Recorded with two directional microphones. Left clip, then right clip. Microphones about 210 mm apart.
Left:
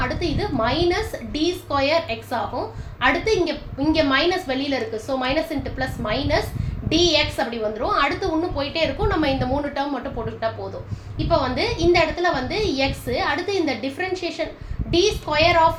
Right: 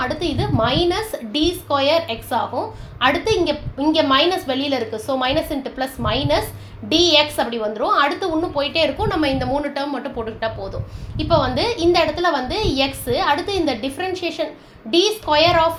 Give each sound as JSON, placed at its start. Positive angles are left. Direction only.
{"t": 0.0, "sound": "a woman's voice", "side_deg": -30}